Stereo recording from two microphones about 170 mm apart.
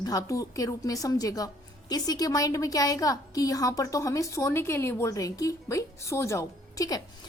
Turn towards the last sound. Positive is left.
turn(degrees=20)  # may be behind; listen again after turning